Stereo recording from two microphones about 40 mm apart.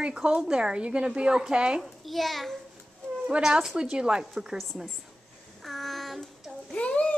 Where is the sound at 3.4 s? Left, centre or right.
Centre.